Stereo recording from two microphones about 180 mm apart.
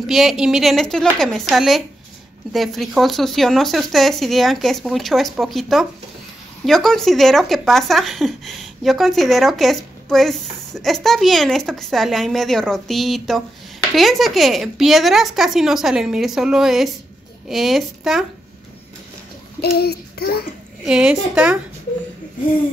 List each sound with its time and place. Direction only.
0.0 s speech: centre (ahead or behind)
19.6 s a sound: 65° left (ahead or behind)
20.8 s speech: 5° right (ahead or behind)